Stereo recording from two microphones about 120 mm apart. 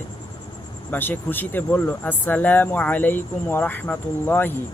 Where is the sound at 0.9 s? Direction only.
15° left (ahead or behind).